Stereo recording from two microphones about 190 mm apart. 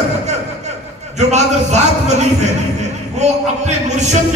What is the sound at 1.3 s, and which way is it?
Speech, 35° right (ahead or behind).